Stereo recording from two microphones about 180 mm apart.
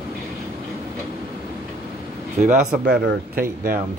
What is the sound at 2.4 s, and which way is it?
Speech, 5° right (ahead or behind).